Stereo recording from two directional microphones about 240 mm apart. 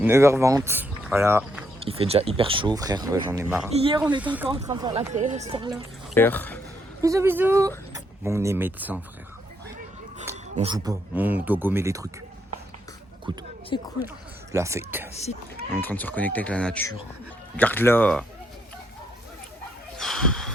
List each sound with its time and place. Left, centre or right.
0.0 s speech: centre
1.8 s speech: right; by 3.7 s centre
3.8 s speech: right
4.2 s speech: centre
4.4 s speech: right
5.7 s speech: centre
7.0 s speech: centre
10.5 s speech: right
10.8 s speech: centre
13.3 s speech: centre
13.7 s speech: centre
14.5 s speech: centre
15.8 s speech: centre
20.0 s a sound: centre